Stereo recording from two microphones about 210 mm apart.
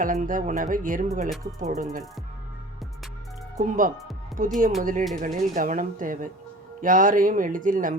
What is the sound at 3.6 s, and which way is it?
Speech, 40° right (ahead or behind).